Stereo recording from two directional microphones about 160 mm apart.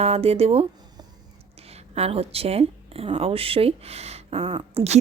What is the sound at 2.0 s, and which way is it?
A woman's voice, 40° right (ahead or behind).